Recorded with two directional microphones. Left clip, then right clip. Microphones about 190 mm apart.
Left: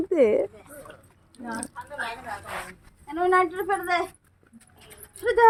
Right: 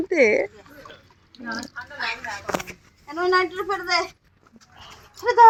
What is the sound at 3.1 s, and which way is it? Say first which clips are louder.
Speech: right 1 dB; 30° left (ahead or behind).